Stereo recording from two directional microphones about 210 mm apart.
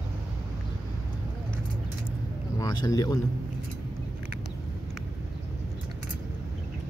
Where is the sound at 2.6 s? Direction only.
20° left (ahead or behind).